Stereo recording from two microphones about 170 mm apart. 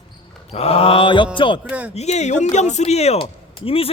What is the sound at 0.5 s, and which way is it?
Speech, 35° left (ahead or behind).